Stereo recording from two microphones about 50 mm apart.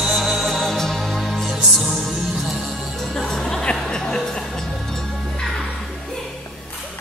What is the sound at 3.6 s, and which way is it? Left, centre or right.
Music, centre.